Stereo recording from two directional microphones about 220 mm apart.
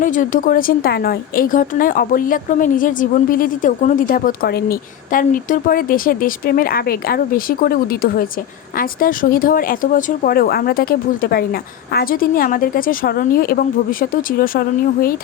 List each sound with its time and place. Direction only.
0.0 s a woman's voice: 35° left (ahead or behind)